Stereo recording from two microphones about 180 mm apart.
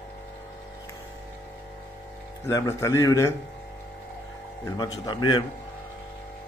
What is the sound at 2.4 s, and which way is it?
Speech, 15° left (ahead or behind).